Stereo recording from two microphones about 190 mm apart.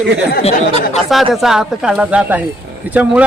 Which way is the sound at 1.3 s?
Centre (ahead or behind).